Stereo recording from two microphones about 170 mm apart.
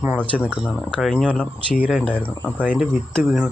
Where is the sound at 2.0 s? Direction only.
10° left (ahead or behind).